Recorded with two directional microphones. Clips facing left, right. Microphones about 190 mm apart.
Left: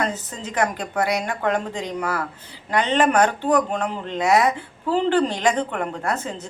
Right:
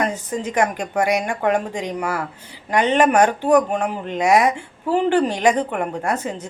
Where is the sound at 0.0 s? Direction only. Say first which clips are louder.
Right 4 dB; 15° right (ahead or behind).